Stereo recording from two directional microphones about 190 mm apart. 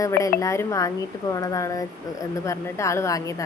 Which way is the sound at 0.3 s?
15° left (ahead or behind).